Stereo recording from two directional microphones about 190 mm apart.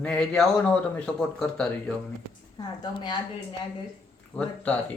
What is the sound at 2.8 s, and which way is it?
Speech, 25° left (ahead or behind).